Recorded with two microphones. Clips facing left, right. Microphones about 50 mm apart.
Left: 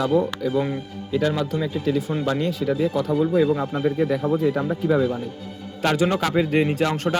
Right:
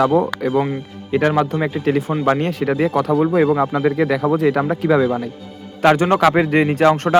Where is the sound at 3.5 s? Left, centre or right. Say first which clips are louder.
Right 5 dB; right.